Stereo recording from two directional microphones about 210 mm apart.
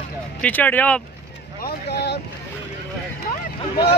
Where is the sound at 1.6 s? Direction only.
50° left (ahead or behind).